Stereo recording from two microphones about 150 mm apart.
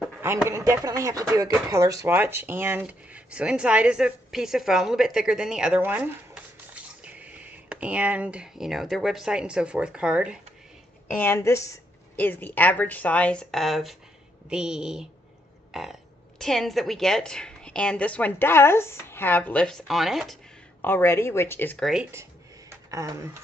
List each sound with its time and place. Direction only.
0.2 s speech: 15° right (ahead or behind)
11.1 s a woman's voice: 15° left (ahead or behind); by 20.3 s centre (ahead or behind)
20.8 s a woman's voice: 15° left (ahead or behind)
22.1 s a sound: 20° right (ahead or behind)